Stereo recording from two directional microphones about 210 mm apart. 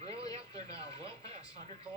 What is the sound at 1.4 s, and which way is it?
Speech, 20° left (ahead or behind).